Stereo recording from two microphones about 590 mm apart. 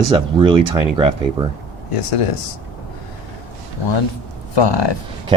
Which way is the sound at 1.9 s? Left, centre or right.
Left.